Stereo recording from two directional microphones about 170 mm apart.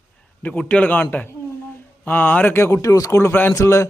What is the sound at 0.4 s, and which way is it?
Speech, 10° left (ahead or behind).